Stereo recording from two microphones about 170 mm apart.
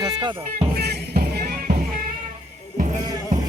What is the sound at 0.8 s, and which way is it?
Music, 75° right (ahead or behind).